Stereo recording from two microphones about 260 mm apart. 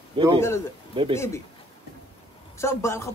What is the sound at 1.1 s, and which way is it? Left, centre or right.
Speech, centre.